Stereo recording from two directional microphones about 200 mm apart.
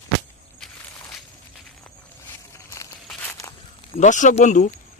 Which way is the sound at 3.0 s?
10° left (ahead or behind).